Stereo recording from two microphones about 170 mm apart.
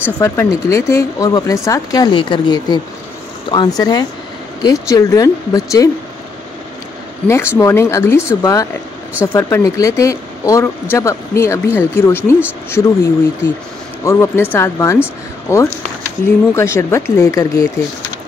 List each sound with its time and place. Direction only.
0.0 s speech: 15° left (ahead or behind)
7.2 s speech: 15° left (ahead or behind)